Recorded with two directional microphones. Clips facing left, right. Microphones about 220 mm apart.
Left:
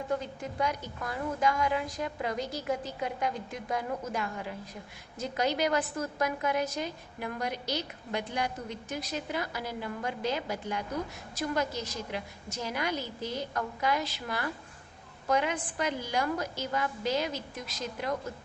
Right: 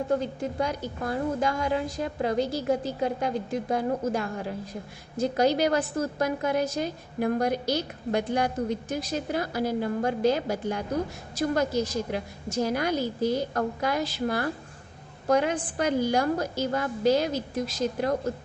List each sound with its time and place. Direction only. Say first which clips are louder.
0.1 s a woman's voice: right 4 dB; 35° right (ahead or behind)